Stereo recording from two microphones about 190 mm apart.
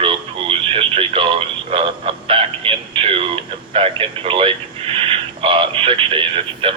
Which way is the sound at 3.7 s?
30° right (ahead or behind).